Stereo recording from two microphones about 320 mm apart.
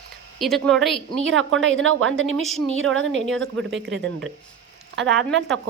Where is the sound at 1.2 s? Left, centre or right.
Right.